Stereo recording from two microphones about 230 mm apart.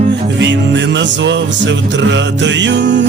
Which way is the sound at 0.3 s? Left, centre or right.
Right.